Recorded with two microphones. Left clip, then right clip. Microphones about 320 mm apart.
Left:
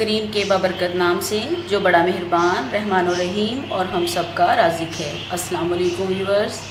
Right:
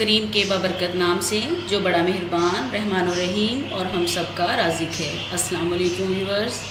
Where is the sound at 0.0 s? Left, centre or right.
Centre.